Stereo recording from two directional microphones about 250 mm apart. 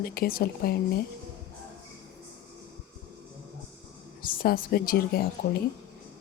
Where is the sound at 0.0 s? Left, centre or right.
Left.